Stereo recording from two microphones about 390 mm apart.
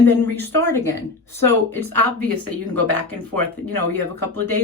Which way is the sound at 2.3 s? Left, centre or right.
Left.